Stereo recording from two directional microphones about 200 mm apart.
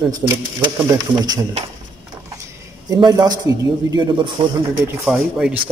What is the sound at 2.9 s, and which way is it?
A man's voice, 20° right (ahead or behind).